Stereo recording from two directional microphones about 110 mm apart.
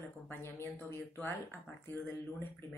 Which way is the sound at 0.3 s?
20° left (ahead or behind).